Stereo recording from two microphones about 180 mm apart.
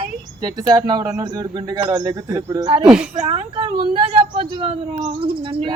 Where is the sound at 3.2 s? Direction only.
30° right (ahead or behind).